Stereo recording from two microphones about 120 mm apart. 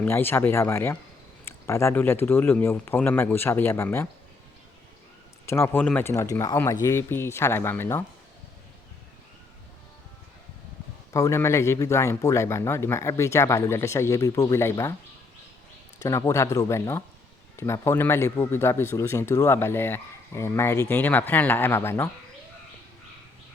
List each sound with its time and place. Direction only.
0.0 s speech: 20° left (ahead or behind)
5.5 s speech: 20° left (ahead or behind)
11.1 s speech: 25° left (ahead or behind)
16.0 s speech: 25° left (ahead or behind)